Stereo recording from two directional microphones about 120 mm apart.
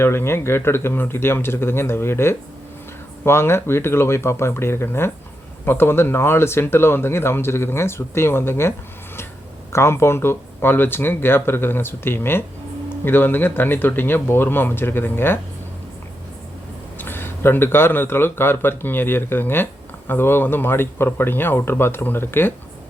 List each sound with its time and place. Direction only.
0.0 s speech: 20° left (ahead or behind)
9.7 s speech: 20° left (ahead or behind)
17.0 s speech: 20° left (ahead or behind)